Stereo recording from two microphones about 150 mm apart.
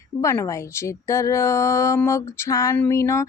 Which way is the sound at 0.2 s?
20° left (ahead or behind).